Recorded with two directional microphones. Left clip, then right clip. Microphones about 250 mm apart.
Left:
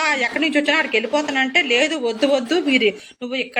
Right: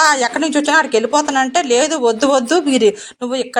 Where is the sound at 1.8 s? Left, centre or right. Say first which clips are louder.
Right 5 dB; right.